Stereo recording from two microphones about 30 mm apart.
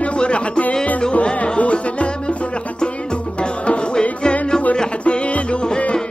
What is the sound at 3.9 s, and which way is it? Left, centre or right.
Music, left.